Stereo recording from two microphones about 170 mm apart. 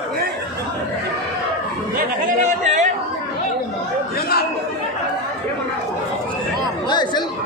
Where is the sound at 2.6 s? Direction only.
45° right (ahead or behind).